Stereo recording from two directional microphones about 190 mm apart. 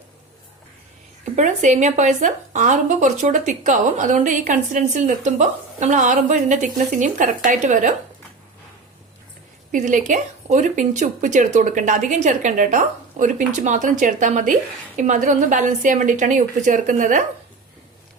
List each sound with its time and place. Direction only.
1.2 s a woman's voice: 40° right (ahead or behind)
9.7 s a woman's voice: 40° right (ahead or behind)